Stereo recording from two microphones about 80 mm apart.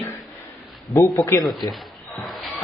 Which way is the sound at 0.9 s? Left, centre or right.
Left.